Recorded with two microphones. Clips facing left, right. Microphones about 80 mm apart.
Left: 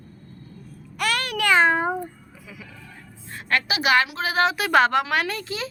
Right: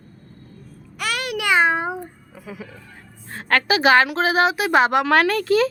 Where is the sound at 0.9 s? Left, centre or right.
Centre.